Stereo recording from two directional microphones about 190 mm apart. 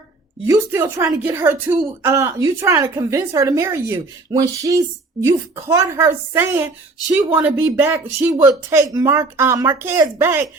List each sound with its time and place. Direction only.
0.4 s a woman's voice: 15° right (ahead or behind)